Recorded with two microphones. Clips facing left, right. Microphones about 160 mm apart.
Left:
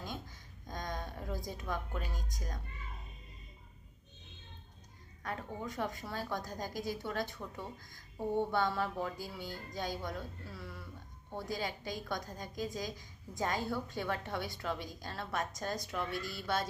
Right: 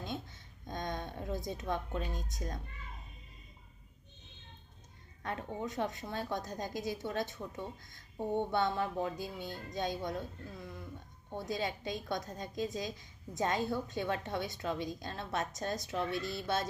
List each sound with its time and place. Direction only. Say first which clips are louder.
0.7 s a sound: right 2 dB; 25° right (ahead or behind)
2.3 s a woman's voice: right 4 dB; 25° right (ahead or behind)
5.2 s a woman's voice: right 2 dB; 25° right (ahead or behind)